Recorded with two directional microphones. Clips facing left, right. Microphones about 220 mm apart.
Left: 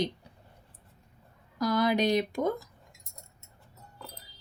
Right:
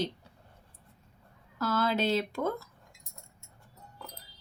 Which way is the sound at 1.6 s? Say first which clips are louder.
Left 3 dB; 15° left (ahead or behind).